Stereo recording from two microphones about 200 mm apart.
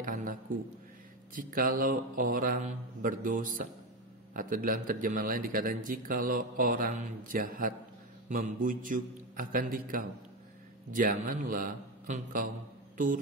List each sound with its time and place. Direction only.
0.0 s a sound: 45° right (ahead or behind)
1.3 s a man's voice: 45° right (ahead or behind)
12.9 s guitar: 40° right (ahead or behind)